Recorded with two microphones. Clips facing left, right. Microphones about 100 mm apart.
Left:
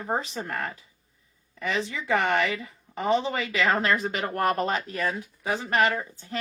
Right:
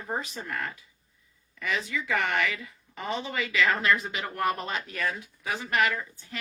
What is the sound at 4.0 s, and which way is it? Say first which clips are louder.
Speech: left 4 dB; 50° left (ahead or behind).